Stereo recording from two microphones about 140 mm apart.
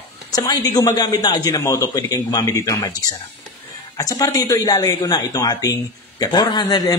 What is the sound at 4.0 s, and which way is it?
A man's voice, 25° left (ahead or behind).